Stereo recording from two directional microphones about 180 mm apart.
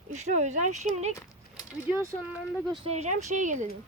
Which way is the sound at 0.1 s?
40° right (ahead or behind).